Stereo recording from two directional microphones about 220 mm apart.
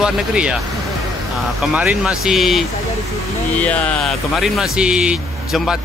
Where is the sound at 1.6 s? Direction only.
5° right (ahead or behind).